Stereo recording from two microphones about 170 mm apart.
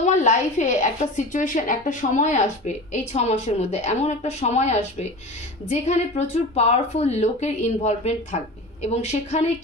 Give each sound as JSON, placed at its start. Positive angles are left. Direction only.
{"t": 0.0, "sound": "speech", "side_deg": 45}